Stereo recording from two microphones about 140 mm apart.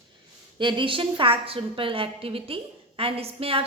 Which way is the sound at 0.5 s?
35° right (ahead or behind).